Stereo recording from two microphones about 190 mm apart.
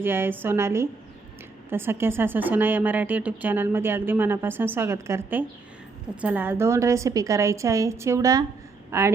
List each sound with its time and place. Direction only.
0.0 s a woman's voice: 10° right (ahead or behind)